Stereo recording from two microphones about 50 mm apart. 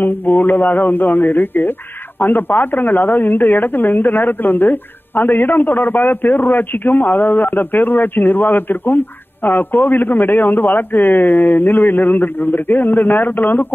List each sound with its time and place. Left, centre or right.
0.0 s a man's voice: left